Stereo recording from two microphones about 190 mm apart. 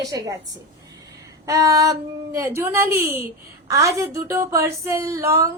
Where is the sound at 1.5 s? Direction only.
15° right (ahead or behind).